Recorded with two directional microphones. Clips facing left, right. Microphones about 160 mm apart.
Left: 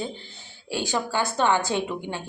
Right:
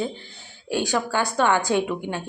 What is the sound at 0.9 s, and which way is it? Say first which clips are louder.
Speech: even; 15° left (ahead or behind).